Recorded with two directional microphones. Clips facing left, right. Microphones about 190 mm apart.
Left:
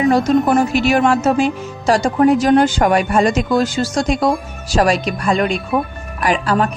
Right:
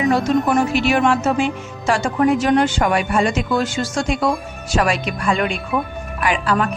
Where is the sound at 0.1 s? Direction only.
40° left (ahead or behind).